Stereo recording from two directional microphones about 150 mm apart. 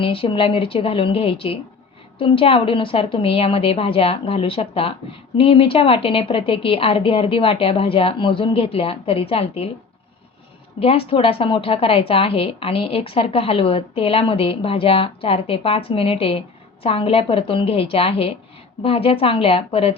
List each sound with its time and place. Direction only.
0.0 s a woman's voice: 35° left (ahead or behind)
10.8 s a woman's voice: 40° left (ahead or behind)